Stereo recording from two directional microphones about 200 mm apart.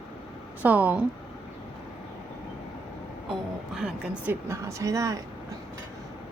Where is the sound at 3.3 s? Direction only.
5° right (ahead or behind).